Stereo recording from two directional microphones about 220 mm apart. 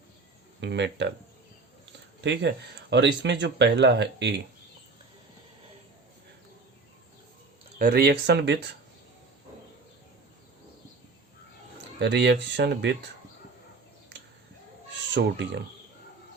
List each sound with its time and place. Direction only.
0.6 s speech: 55° right (ahead or behind)
2.2 s speech: 50° right (ahead or behind)
7.8 s speech: 45° right (ahead or behind)
11.9 s speech: 50° right (ahead or behind)
15.1 s speech: 50° right (ahead or behind)